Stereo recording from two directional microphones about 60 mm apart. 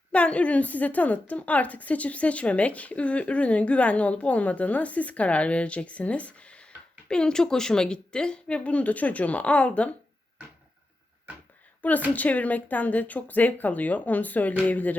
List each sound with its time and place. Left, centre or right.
0.1 s a woman's voice: left
11.8 s a woman's voice: left